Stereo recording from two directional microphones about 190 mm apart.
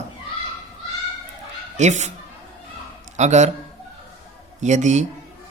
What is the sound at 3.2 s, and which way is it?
Speech, 35° right (ahead or behind).